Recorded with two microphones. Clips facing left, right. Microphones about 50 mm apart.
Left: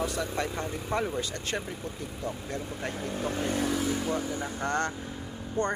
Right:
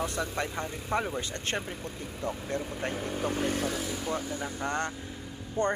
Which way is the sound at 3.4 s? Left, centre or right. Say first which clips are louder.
Left 2 dB; centre.